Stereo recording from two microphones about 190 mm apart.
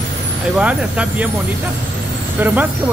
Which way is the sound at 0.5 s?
5° right (ahead or behind).